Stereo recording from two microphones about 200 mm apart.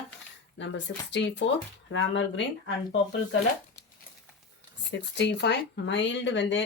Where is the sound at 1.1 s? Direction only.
60° left (ahead or behind).